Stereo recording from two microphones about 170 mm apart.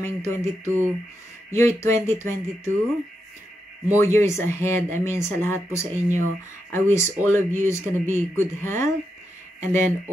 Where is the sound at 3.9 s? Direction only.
15° left (ahead or behind).